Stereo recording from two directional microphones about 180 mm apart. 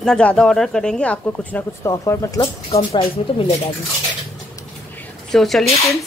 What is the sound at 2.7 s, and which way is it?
Speech, 35° left (ahead or behind).